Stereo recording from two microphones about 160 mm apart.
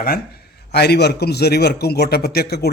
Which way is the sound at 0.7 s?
90° left.